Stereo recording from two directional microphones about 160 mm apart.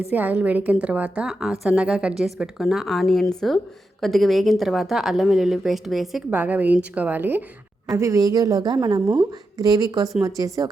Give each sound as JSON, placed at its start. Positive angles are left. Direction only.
{"t": 0.1, "sound": "a woman's voice", "side_deg": -10}